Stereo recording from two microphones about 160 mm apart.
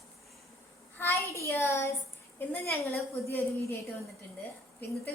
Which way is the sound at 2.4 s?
10° left (ahead or behind).